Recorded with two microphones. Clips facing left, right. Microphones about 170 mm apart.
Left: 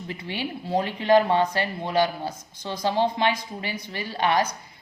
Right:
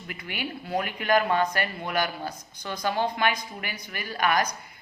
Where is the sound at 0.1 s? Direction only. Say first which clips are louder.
Left 3 dB; 30° left (ahead or behind).